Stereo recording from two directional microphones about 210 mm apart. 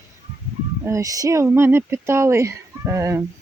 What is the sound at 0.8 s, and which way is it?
Speech, 15° right (ahead or behind).